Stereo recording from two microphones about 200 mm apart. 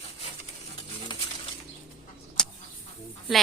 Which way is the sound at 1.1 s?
25° left (ahead or behind).